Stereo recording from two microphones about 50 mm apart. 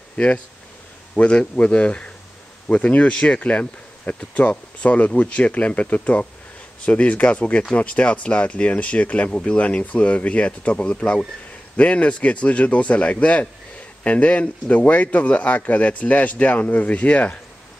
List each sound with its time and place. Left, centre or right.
1.1 s speech: left